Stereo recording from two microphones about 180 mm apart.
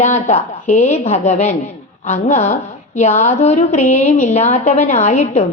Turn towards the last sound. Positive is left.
turn(degrees=40)  # may be behind; listen again after turning